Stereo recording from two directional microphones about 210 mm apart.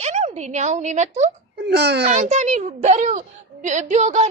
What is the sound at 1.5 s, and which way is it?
Speech, 50° right (ahead or behind).